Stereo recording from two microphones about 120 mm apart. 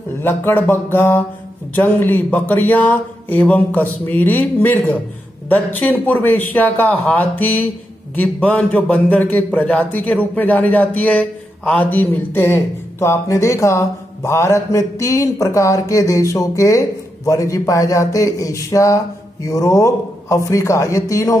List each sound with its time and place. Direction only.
0.2 s a man's voice: 20° left (ahead or behind)